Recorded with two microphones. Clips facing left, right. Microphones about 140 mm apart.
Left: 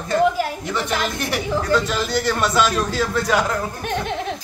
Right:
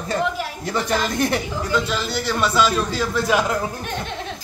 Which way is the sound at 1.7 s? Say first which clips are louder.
Left 2 dB; centre (ahead or behind).